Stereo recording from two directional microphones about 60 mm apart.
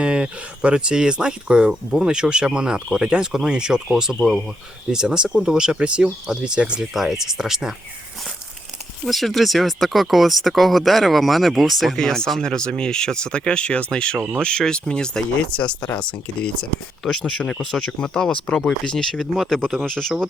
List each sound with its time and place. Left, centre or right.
0.0 s speech: centre
9.0 s speech: centre
11.9 s speech: centre
17.0 s speech: centre